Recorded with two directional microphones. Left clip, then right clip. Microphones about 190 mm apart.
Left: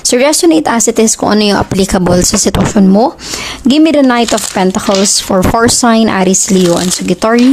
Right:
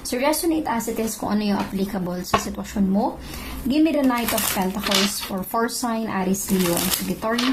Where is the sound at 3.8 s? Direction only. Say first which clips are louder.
Left 12 dB; 60° left (ahead or behind).